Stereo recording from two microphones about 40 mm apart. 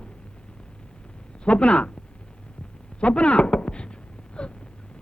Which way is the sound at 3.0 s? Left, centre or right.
Left.